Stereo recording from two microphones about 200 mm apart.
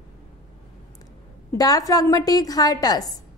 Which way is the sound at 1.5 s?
20° left (ahead or behind).